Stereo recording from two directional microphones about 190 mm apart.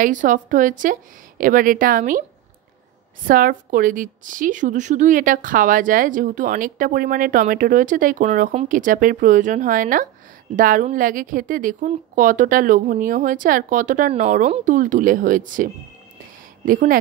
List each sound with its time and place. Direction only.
0.0 s a woman's voice: 40° right (ahead or behind)
3.3 s a woman's voice: 45° right (ahead or behind)